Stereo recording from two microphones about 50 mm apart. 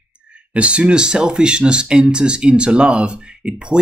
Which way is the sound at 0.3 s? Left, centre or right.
Right.